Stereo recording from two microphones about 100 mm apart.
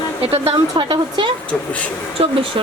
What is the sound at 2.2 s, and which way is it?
Speech, 75° right (ahead or behind).